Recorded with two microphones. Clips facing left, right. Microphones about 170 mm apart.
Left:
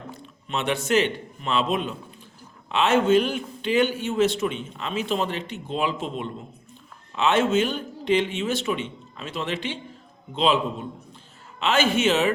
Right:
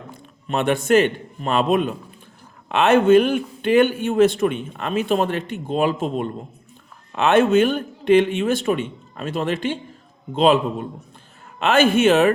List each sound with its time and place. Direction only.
0.4 s a man's voice: 50° right (ahead or behind)
7.1 s a man's voice: 55° right (ahead or behind)